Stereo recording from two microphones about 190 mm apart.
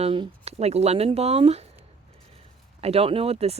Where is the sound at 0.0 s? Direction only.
30° right (ahead or behind).